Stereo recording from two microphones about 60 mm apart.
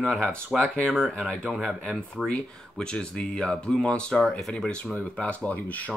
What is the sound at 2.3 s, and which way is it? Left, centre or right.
Speech, centre.